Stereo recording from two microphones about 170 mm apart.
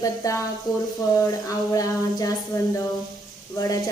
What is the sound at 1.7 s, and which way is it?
Speech, 20° left (ahead or behind).